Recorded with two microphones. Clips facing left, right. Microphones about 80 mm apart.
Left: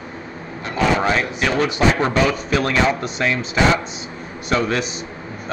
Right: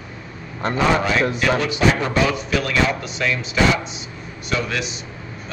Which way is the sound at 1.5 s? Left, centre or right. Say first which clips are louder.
Left 2 dB; left.